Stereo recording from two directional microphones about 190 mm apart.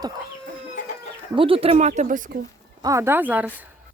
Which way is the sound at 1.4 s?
30° right (ahead or behind).